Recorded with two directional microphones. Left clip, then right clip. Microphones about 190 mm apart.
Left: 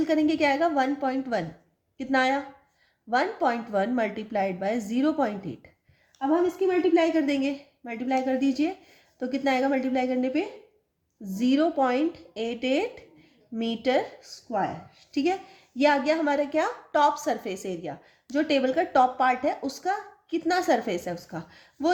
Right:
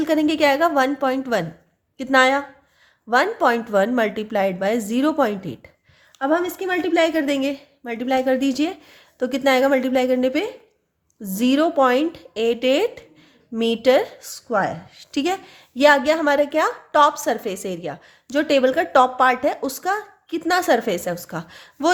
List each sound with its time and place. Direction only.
0.0 s a woman's voice: 30° right (ahead or behind)
6.7 s a woman's voice: 45° right (ahead or behind); by 14.3 s 30° right (ahead or behind)
14.5 s a woman's voice: 45° right (ahead or behind)